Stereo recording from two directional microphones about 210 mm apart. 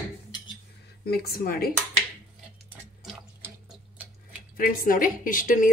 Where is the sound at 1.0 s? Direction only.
45° left (ahead or behind).